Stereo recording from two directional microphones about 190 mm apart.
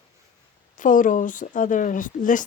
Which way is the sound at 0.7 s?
45° left (ahead or behind).